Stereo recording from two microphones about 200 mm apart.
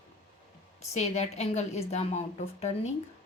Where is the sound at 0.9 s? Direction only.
35° left (ahead or behind).